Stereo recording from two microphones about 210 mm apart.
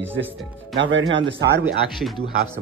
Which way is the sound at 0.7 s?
65° right (ahead or behind).